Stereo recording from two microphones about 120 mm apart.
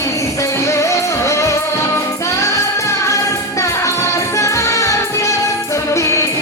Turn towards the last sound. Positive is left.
turn(degrees=25)  # may be behind; listen again after turning